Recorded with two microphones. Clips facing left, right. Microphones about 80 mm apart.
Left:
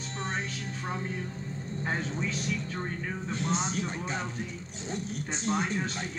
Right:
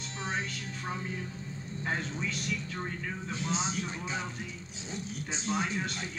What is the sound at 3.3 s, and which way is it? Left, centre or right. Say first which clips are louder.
Speech: left 3 dB; left.